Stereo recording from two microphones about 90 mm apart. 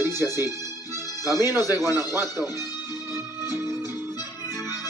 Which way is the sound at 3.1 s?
30° right (ahead or behind).